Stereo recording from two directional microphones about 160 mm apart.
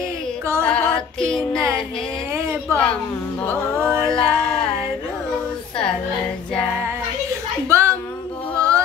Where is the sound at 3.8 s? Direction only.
15° right (ahead or behind).